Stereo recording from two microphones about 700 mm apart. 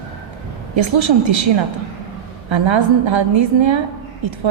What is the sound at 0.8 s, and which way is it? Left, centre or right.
A woman's voice, right.